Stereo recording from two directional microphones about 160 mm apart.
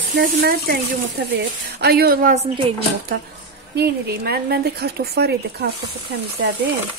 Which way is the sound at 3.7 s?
85° right.